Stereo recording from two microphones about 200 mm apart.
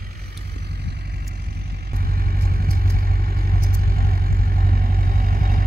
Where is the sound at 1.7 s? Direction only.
50° right (ahead or behind).